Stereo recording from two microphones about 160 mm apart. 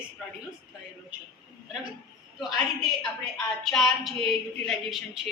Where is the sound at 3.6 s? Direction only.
Centre (ahead or behind).